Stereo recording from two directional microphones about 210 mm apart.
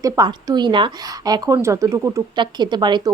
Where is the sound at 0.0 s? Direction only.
15° right (ahead or behind).